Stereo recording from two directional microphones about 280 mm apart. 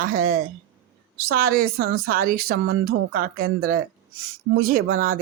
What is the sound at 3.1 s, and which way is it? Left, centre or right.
Speech, right.